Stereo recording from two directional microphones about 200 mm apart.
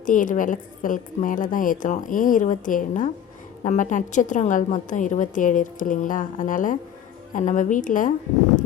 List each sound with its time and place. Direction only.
0.0 s a woman's voice: 40° left (ahead or behind)